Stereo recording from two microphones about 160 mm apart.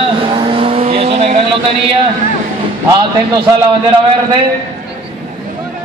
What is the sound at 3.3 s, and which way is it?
Speech, 30° right (ahead or behind).